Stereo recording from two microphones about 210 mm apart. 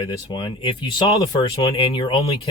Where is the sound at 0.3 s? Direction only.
25° left (ahead or behind).